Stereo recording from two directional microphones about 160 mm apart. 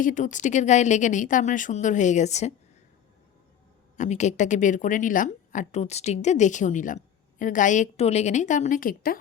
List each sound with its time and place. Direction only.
0.0 s a woman's voice: 50° left (ahead or behind)
3.9 s a woman's voice: 50° left (ahead or behind)